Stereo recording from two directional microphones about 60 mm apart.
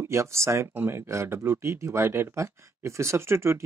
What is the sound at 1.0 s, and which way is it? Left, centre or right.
Speech, right.